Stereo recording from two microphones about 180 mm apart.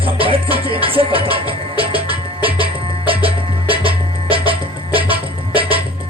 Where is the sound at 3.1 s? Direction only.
30° right (ahead or behind).